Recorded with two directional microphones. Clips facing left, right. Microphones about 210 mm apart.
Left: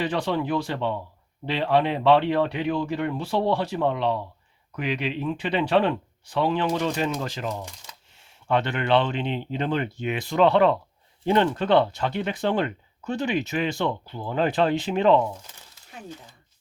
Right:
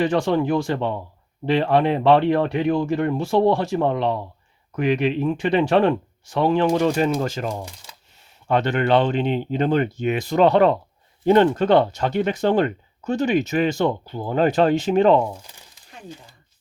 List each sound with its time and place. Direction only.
0.0 s speech: 45° right (ahead or behind)